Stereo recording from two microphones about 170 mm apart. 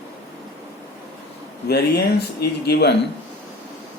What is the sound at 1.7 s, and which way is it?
Speech, 70° left (ahead or behind).